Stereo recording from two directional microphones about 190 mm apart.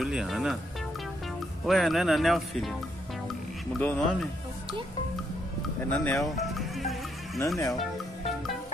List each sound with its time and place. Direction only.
0.0 s speech: centre (ahead or behind)
1.7 s speech: centre (ahead or behind)
3.7 s speech: 5° left (ahead or behind)
5.9 s speech: 15° left (ahead or behind)
6.2 s music: centre (ahead or behind)
7.3 s speech: 15° left (ahead or behind)
7.7 s music: centre (ahead or behind)